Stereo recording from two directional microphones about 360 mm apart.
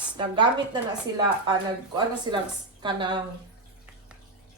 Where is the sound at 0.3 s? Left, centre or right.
Centre.